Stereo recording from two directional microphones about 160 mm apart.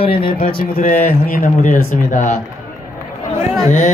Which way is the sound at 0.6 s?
65° left (ahead or behind).